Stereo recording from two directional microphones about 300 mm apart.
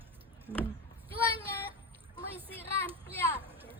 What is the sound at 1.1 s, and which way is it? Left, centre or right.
Speech, centre.